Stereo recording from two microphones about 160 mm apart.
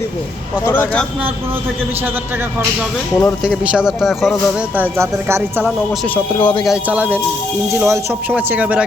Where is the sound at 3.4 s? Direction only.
5° right (ahead or behind).